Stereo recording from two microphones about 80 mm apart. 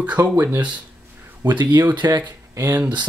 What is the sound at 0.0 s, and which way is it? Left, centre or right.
Speech, centre.